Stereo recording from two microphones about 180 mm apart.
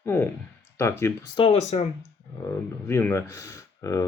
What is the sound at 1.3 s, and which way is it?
Speech, 35° left (ahead or behind).